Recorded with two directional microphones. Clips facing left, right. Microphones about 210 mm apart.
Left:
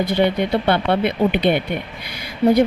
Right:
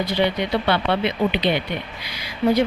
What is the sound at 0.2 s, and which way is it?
Speech, 50° left (ahead or behind).